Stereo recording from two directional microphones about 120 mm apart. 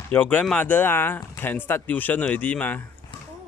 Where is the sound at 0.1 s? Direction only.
15° left (ahead or behind).